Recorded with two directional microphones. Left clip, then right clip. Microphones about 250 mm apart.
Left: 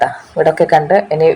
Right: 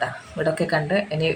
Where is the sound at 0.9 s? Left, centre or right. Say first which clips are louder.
Left 12 dB; centre.